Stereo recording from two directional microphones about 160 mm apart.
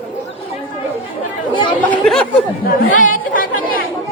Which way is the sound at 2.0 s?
5° left (ahead or behind).